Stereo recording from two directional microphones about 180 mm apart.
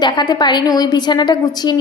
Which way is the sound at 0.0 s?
25° left (ahead or behind).